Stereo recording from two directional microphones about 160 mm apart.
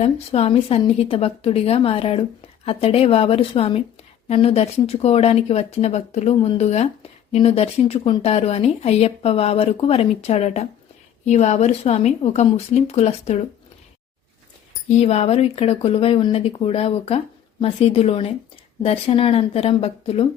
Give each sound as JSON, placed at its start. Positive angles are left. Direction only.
{"t": 0.0, "sound": "speech", "side_deg": 40}
{"t": 14.8, "sound": "speech", "side_deg": 45}